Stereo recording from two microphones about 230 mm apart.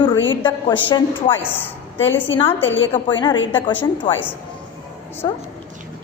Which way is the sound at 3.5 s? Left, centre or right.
Left.